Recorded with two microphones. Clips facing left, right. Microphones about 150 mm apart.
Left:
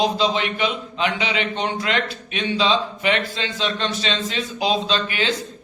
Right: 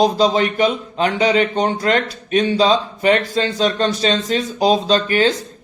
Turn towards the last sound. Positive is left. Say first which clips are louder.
# right 8 dB
turn(degrees=-45)  # may be behind; listen again after turning